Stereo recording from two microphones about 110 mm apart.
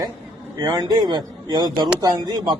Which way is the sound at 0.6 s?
40° right (ahead or behind).